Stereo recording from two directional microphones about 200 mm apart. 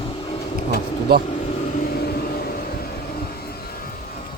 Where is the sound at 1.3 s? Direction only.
40° left (ahead or behind).